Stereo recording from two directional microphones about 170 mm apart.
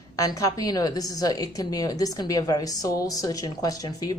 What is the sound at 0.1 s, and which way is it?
A woman's voice, 20° left (ahead or behind).